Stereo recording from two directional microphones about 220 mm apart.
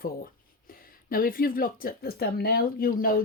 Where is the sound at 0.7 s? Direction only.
40° left (ahead or behind).